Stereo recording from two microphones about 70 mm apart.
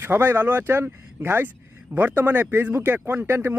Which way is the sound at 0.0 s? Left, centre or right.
Right.